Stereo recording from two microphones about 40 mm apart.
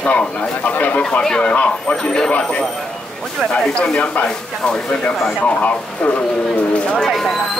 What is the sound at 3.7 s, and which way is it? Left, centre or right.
Speech, left.